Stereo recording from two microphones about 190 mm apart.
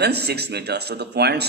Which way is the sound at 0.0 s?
60° right (ahead or behind).